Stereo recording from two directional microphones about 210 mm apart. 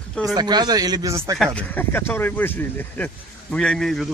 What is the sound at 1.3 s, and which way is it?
Speech, 5° left (ahead or behind).